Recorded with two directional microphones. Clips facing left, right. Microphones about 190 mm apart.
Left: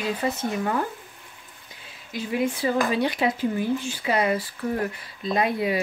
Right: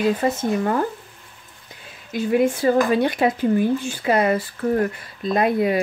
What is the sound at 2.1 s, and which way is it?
Speech, 50° right (ahead or behind).